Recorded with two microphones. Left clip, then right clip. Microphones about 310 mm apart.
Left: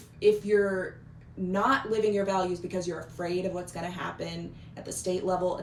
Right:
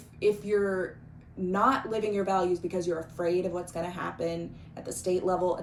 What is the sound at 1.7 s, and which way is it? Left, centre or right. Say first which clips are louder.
Speech: left 4 dB; right.